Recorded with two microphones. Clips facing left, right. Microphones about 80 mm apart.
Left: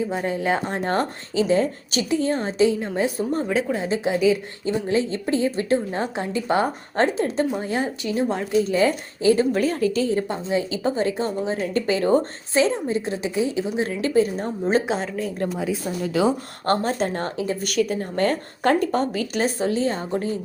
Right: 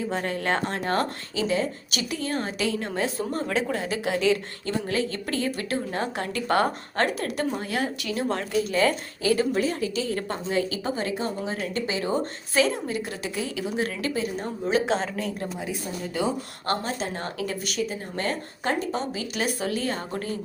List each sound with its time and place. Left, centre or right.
0.1 s speech: centre
0.7 s a woman's voice: left
9.5 s speech: left
10.1 s a woman's voice: centre; by 12.2 s left
12.5 s a woman's voice: left
14.8 s speech: centre
16.6 s a woman's voice: left
17.3 s a woman's voice: left
17.8 s speech: left
19.5 s a woman's voice: left